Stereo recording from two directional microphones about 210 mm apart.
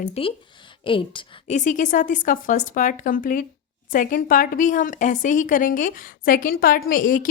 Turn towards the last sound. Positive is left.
turn(degrees=40)  # may be behind; listen again after turning